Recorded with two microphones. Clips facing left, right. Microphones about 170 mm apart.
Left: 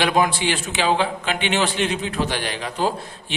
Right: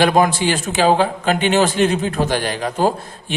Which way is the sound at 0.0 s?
45° right (ahead or behind).